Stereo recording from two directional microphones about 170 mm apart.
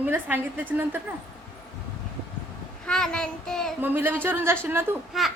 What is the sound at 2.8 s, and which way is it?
Child singing, 5° left (ahead or behind).